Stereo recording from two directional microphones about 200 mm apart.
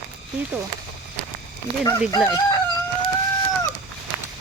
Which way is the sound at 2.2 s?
15° left (ahead or behind).